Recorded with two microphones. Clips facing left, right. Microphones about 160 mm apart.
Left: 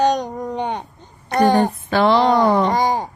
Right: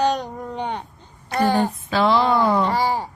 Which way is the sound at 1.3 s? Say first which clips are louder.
Left 4 dB; 55° left (ahead or behind).